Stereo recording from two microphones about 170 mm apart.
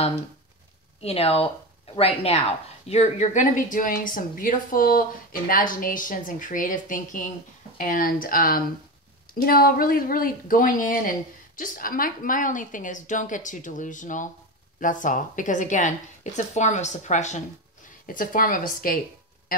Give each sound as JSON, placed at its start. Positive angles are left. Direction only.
{"t": 1.0, "sound": "speech", "side_deg": 35}
{"t": 18.0, "sound": "speech", "side_deg": 55}